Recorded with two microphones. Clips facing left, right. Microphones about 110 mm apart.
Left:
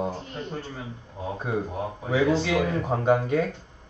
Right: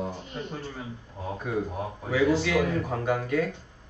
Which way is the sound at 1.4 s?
30° left (ahead or behind).